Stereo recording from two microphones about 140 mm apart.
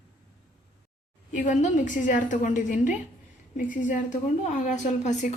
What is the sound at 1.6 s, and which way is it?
A woman's voice, 65° left (ahead or behind).